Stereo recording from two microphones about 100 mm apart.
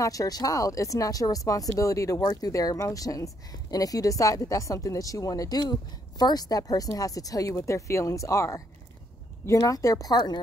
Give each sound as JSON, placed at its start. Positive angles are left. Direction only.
{"t": 0.0, "sound": "speech", "side_deg": 35}